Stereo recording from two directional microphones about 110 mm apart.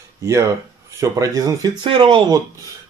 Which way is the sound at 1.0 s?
30° right (ahead or behind).